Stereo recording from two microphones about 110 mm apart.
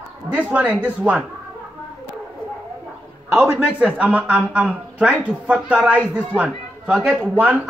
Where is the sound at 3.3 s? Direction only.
20° right (ahead or behind).